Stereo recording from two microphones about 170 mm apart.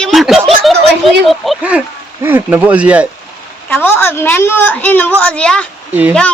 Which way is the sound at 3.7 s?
10° left (ahead or behind).